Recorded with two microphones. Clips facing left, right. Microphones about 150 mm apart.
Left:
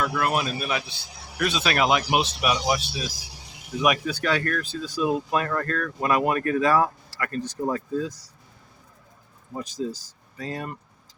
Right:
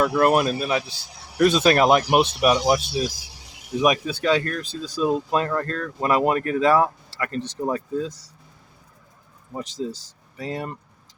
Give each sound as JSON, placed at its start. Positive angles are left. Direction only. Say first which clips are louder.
{"t": 0.0, "sound": "speech", "louder": "right 7 dB", "side_deg": -40}
{"t": 0.6, "sound": "speech", "louder": "right 4 dB", "side_deg": -30}
{"t": 1.4, "sound": "speech", "louder": "right 7 dB", "side_deg": -45}
{"t": 3.8, "sound": "speech", "louder": "right 3 dB", "side_deg": -25}
{"t": 4.6, "sound": "speech", "louder": "right 2 dB", "side_deg": -35}
{"t": 9.6, "sound": "speech", "louder": "right 1 dB", "side_deg": -25}